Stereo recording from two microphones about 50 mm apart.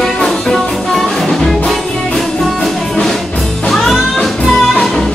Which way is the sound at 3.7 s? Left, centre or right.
Centre.